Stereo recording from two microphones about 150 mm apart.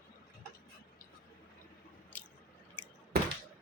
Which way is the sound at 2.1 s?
10° left (ahead or behind).